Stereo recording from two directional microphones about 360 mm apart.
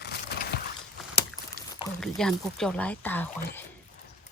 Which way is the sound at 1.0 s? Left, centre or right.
Centre.